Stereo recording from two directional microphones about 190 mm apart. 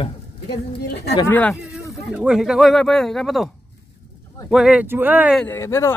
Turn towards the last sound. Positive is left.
turn(degrees=15)  # may be behind; listen again after turning